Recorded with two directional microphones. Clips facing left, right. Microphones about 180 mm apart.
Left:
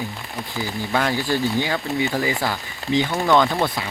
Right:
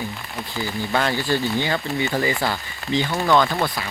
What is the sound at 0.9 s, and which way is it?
Speech, 10° left (ahead or behind).